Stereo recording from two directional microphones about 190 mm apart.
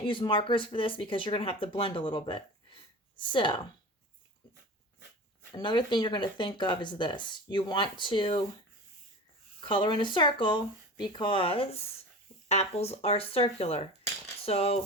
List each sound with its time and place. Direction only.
0.0 s speech: 25° left (ahead or behind)
5.5 s speech: 25° left (ahead or behind)
9.6 s speech: 25° left (ahead or behind)